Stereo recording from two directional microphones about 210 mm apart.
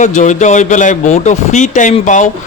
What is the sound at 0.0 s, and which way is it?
Speech, 35° left (ahead or behind).